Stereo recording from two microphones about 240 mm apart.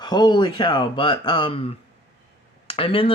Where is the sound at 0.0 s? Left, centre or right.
Centre.